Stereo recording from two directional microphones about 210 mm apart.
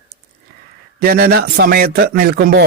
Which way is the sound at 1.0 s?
45° right (ahead or behind).